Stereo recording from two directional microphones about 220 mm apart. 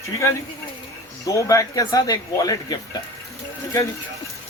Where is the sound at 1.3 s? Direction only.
15° left (ahead or behind).